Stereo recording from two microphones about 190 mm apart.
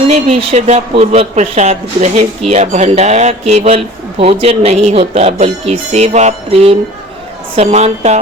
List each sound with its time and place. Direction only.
0.1 s speech: 35° right (ahead or behind)